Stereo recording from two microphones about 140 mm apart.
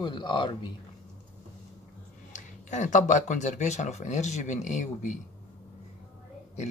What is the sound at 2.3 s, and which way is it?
Speech, 60° left (ahead or behind).